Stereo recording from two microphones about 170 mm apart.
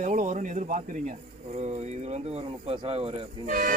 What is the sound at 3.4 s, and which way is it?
Speech, 50° right (ahead or behind).